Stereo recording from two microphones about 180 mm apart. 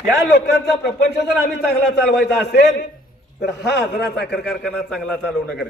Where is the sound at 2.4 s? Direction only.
75° left (ahead or behind).